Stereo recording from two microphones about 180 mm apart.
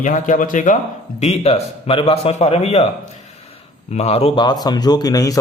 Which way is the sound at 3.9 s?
35° left (ahead or behind).